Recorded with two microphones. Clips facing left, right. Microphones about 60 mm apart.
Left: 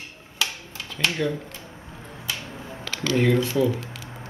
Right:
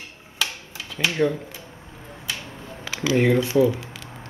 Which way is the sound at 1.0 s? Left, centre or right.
Centre.